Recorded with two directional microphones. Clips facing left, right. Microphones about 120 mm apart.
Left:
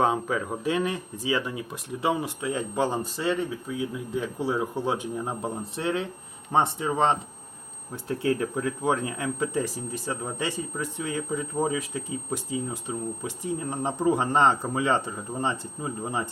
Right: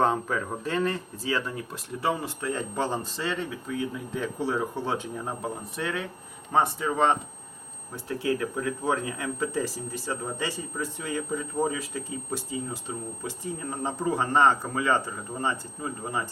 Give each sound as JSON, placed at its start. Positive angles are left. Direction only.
{"t": 0.0, "sound": "speech", "side_deg": 10}
{"t": 5.4, "sound": "speech", "side_deg": 25}